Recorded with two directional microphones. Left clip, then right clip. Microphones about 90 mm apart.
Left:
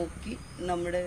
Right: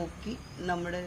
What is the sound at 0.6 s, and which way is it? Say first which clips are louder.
Speech: left 2 dB; 35° right (ahead or behind).